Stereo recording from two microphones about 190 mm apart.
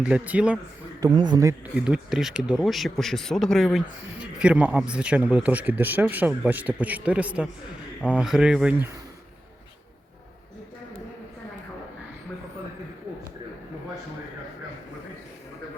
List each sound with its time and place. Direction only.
0.0 s speech: 5° right (ahead or behind)
1.0 s a man's voice: 20° right (ahead or behind)
1.7 s speech: 5° right (ahead or behind)